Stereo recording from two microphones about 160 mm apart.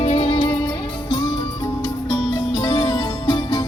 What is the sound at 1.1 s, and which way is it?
Music, 25° left (ahead or behind).